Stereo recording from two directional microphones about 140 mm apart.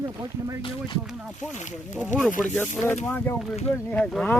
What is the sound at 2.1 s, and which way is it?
Speech, 60° left (ahead or behind).